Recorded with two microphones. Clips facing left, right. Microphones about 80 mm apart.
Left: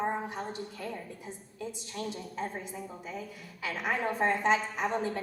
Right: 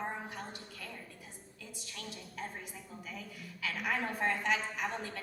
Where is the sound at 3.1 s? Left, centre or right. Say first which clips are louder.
Left 5 dB; left.